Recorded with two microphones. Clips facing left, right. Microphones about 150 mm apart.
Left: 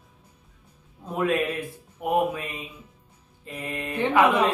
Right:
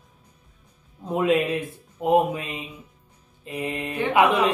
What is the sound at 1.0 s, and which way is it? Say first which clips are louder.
A man's voice: right 3 dB; 20° right (ahead or behind).